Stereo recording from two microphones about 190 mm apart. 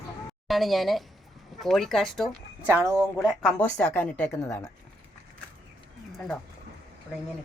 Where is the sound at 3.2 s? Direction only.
Centre (ahead or behind).